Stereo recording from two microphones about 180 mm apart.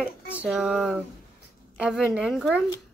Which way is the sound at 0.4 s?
5° right (ahead or behind).